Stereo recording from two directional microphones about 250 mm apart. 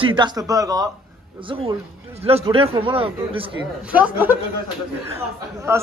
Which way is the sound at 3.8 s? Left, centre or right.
Centre.